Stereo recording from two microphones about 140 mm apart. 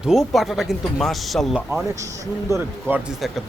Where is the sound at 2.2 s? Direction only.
20° right (ahead or behind).